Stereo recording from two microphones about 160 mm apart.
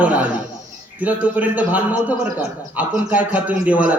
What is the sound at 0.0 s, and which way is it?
A man's voice, 10° right (ahead or behind).